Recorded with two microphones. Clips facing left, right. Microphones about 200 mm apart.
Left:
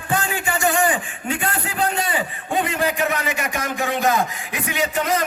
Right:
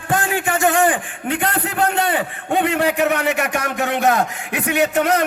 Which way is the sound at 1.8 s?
65° right (ahead or behind).